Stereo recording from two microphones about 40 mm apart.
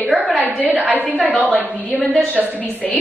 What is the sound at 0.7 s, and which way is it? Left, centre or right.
Speech, right.